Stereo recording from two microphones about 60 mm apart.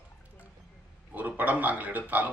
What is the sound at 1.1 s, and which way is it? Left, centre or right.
Speech, right.